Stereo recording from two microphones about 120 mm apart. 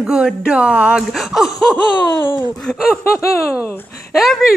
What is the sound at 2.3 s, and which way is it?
Speech, 40° left (ahead or behind).